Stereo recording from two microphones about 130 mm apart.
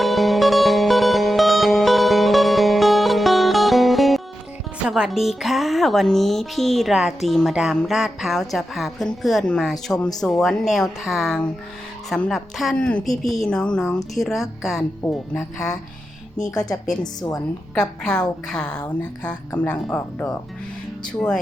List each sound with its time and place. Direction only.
0.0 s music: centre (ahead or behind)
4.9 s speech: 5° right (ahead or behind)
15.4 s speech: 25° left (ahead or behind)
17.7 s speech: 5° left (ahead or behind)